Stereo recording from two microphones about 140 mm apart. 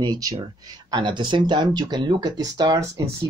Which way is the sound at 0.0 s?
30° right (ahead or behind).